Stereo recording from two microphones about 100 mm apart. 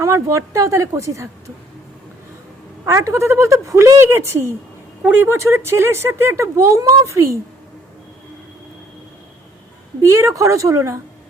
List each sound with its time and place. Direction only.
0.0 s a woman's voice: 30° right (ahead or behind)
2.8 s speech: 30° right (ahead or behind)
10.1 s a woman's voice: 30° right (ahead or behind)